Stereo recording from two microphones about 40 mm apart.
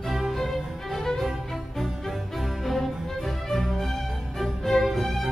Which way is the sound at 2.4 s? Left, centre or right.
Centre.